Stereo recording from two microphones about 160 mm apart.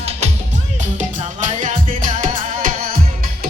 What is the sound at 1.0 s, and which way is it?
Music, 50° right (ahead or behind).